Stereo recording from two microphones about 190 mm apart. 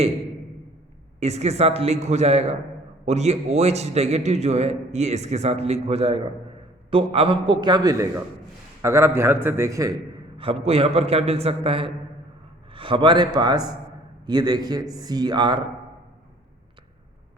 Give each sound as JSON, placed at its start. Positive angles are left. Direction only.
{"t": 1.2, "sound": "a man's voice", "side_deg": -35}
{"t": 10.3, "sound": "a man's voice", "side_deg": -30}